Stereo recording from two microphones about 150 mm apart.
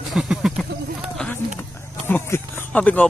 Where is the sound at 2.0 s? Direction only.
10° left (ahead or behind).